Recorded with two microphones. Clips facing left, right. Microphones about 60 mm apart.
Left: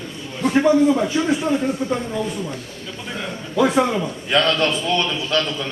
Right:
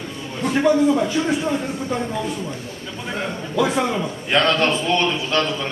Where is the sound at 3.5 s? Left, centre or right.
Centre.